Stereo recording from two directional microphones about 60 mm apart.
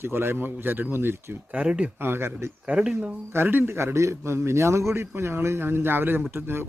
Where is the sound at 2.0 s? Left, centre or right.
Right.